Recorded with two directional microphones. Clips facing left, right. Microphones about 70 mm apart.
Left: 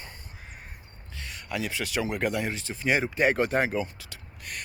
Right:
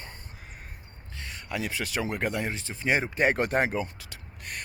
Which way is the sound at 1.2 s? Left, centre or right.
Right.